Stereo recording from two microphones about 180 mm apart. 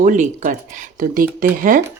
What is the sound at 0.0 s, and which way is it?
Speech, 45° right (ahead or behind).